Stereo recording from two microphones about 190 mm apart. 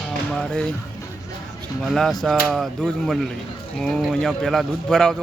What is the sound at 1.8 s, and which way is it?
Speech, centre (ahead or behind).